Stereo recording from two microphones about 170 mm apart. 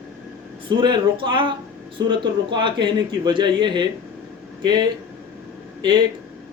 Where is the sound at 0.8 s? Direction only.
30° right (ahead or behind).